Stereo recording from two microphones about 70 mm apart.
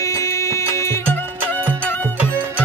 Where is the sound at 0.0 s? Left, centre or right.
Left.